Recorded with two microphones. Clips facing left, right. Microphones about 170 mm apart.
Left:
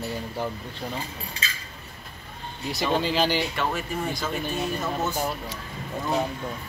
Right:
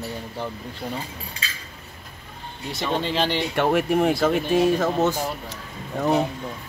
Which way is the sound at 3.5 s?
65° right (ahead or behind).